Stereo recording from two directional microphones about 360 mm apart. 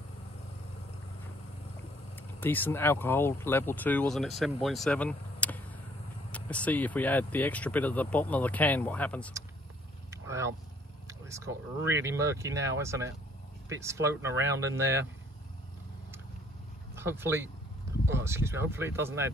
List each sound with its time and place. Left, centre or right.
2.4 s speech: centre
10.1 s vehicle: centre
11.1 s speech: centre
16.9 s speech: centre